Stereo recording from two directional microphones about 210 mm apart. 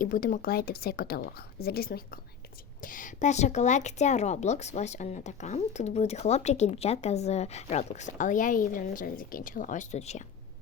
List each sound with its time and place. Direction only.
0.0 s a woman's voice: 40° left (ahead or behind)